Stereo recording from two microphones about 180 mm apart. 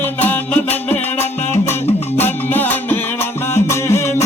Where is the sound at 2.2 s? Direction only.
10° left (ahead or behind).